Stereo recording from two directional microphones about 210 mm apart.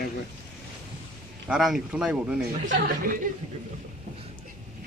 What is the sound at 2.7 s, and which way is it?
Speech, 40° right (ahead or behind).